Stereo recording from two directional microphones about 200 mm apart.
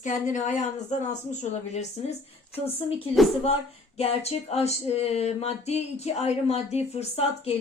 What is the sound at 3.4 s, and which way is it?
A woman's voice, 30° left (ahead or behind).